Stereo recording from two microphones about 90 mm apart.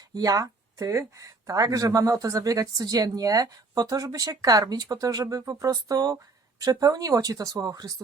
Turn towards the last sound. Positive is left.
turn(degrees=-45)  # may be behind; listen again after turning